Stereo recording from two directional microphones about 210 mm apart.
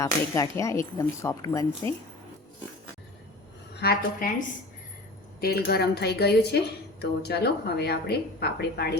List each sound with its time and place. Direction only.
0.0 s speech: 15° left (ahead or behind)
3.8 s speech: 50° left (ahead or behind)
5.4 s speech: 50° left (ahead or behind)